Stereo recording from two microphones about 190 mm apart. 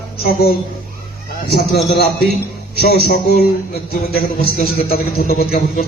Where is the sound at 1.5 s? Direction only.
55° left (ahead or behind).